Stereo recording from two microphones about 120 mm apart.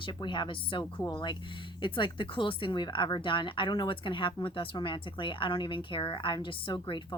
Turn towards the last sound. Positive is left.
turn(degrees=45)  # may be behind; listen again after turning